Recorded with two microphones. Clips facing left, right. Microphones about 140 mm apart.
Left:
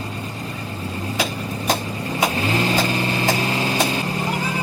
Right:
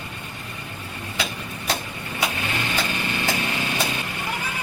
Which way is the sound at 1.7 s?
35° left (ahead or behind).